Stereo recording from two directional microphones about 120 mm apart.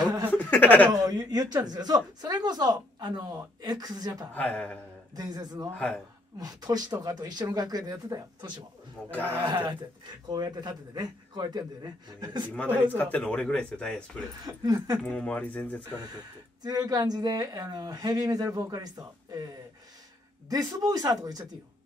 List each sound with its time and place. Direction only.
0.0 s a sound: 35° right (ahead or behind)
0.3 s a sound: 15° left (ahead or behind)
1.0 s speech: 30° right (ahead or behind)
4.3 s speech: 10° left (ahead or behind)
5.1 s speech: 35° right (ahead or behind)
5.8 s speech: 10° left (ahead or behind)
6.4 s speech: 35° right (ahead or behind)
9.1 s speech: 15° left (ahead or behind)
10.2 s speech: 35° right (ahead or behind)
12.9 s speech: 15° left (ahead or behind)
14.4 s speech: 30° right (ahead or behind)
15.0 s speech: 10° left (ahead or behind)
16.0 s speech: 30° right (ahead or behind)
20.4 s speech: 30° right (ahead or behind)